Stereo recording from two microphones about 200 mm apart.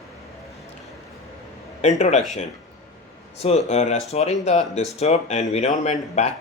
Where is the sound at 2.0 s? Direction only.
35° left (ahead or behind).